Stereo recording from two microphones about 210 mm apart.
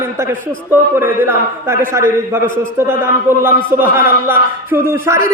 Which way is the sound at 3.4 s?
10° right (ahead or behind).